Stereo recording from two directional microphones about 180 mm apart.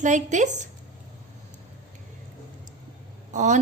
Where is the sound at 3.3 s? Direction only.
45° right (ahead or behind).